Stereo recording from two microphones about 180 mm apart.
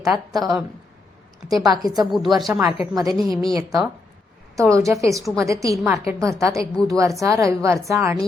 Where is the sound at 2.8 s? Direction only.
20° right (ahead or behind).